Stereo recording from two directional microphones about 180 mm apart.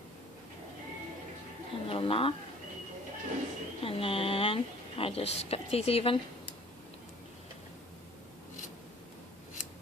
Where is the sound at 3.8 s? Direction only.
30° left (ahead or behind).